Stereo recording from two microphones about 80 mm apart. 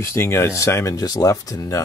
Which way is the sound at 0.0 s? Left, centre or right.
Left.